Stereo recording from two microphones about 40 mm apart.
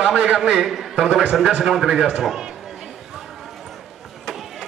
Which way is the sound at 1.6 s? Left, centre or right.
Centre.